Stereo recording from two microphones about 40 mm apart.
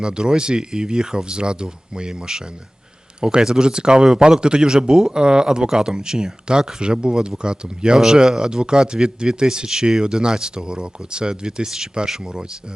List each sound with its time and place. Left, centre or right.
0.0 s a man's voice: centre
9.6 s a man's voice: centre